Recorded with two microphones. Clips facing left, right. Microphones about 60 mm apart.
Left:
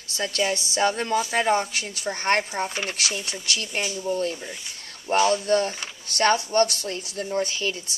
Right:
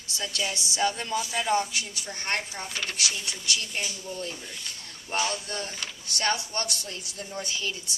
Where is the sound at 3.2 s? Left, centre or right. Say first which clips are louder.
Left 2 dB; left.